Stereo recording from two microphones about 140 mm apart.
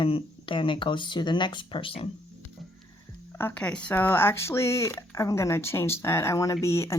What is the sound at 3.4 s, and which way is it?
Speech, 10° left (ahead or behind).